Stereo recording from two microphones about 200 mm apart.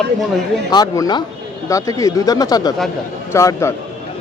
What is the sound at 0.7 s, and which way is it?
Speech, 20° left (ahead or behind).